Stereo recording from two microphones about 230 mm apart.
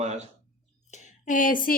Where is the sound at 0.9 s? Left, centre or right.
Left.